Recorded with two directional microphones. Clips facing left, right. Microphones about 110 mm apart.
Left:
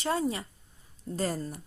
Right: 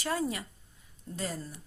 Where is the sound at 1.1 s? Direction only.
45° left (ahead or behind).